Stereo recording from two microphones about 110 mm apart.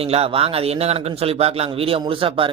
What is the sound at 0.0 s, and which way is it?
A man's voice, 65° right (ahead or behind).